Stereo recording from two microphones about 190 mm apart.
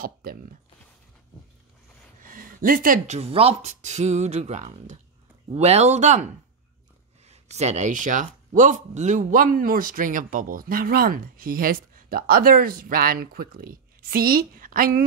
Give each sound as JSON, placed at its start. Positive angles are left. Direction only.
{"t": 0.0, "sound": "speech", "side_deg": -50}
{"t": 2.2, "sound": "a sound", "side_deg": -45}
{"t": 3.2, "sound": "speech", "side_deg": -30}